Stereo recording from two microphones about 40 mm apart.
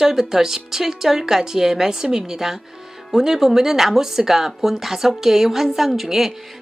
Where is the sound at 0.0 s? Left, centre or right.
Centre.